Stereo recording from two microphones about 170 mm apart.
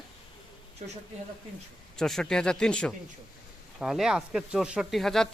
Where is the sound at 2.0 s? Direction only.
Centre (ahead or behind).